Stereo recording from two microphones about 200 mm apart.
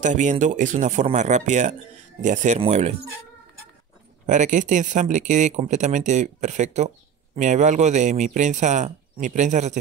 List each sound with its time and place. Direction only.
0.0 s speech: 35° right (ahead or behind)
4.3 s speech: 40° right (ahead or behind)